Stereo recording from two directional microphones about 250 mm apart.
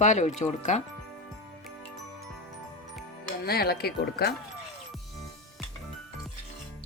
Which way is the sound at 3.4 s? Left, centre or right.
Left.